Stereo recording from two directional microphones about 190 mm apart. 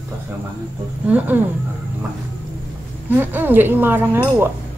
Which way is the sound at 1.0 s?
10° right (ahead or behind).